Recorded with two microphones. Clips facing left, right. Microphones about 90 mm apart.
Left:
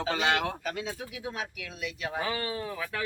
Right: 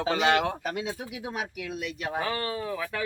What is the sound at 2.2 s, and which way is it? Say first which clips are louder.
Speech: right 2 dB; 5° left (ahead or behind).